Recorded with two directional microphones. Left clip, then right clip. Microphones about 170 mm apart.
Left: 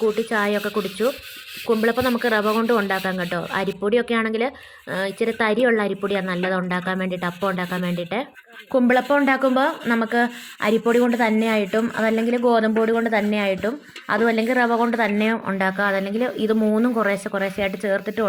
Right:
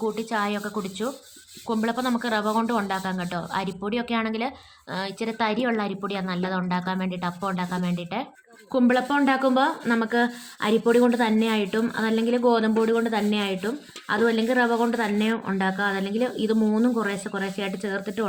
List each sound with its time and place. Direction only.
0.0 s speech: 25° left (ahead or behind)